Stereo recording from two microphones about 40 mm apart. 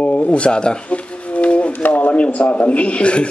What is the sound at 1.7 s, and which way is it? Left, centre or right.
Speech, left.